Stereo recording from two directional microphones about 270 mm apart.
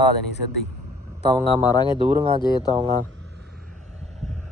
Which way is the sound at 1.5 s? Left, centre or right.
Centre.